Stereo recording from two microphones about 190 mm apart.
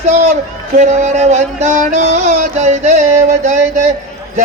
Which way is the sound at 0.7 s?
40° right (ahead or behind).